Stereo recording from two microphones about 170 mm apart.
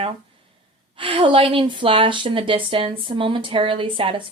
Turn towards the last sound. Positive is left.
turn(degrees=-30)  # may be behind; listen again after turning